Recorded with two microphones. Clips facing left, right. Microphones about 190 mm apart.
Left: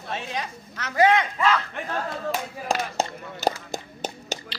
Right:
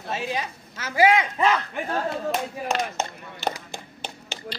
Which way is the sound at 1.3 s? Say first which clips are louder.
Right 1 dB; 20° right (ahead or behind).